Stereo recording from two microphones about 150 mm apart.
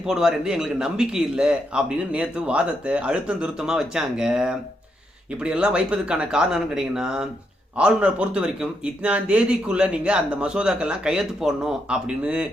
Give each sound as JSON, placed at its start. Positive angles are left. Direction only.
{"t": 0.0, "sound": "a man's voice", "side_deg": -5}